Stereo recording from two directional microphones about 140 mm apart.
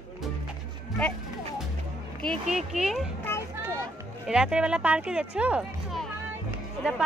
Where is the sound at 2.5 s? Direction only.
5° right (ahead or behind).